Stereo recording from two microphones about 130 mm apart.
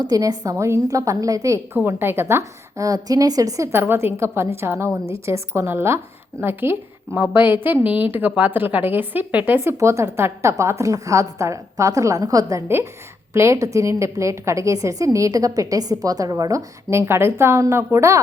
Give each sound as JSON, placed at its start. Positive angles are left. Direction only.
{"t": 0.0, "sound": "a woman's voice", "side_deg": -30}
{"t": 1.7, "sound": "a woman's voice", "side_deg": -15}